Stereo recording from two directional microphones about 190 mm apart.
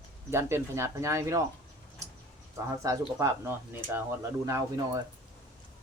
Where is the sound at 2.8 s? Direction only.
15° right (ahead or behind).